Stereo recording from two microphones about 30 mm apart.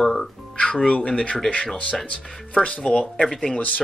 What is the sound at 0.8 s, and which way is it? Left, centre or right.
Speech, left.